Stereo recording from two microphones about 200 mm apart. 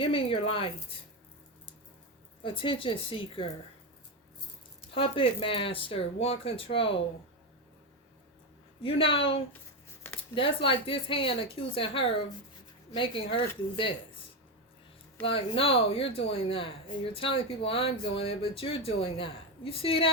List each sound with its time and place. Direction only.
0.0 s speech: 25° left (ahead or behind)
2.4 s speech: 25° left (ahead or behind)
4.9 s speech: 25° left (ahead or behind)
8.8 s speech: 25° left (ahead or behind)
15.2 s speech: 25° left (ahead or behind)